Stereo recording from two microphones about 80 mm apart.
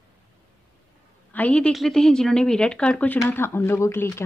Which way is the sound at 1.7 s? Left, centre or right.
Centre.